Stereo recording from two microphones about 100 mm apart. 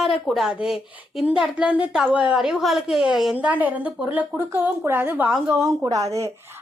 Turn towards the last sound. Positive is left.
turn(degrees=-35)  # may be behind; listen again after turning